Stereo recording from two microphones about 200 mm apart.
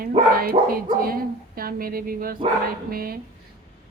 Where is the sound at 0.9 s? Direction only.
45° right (ahead or behind).